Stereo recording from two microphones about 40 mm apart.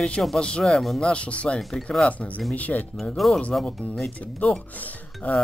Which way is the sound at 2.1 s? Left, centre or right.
Left.